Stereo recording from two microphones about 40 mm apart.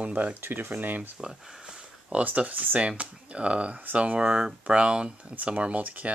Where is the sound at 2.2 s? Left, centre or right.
Right.